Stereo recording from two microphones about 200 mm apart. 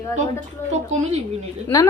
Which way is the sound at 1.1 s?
35° right (ahead or behind).